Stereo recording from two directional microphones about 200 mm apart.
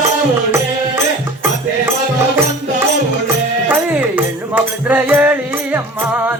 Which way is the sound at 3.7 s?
10° right (ahead or behind).